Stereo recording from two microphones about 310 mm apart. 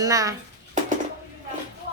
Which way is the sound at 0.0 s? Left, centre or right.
Centre.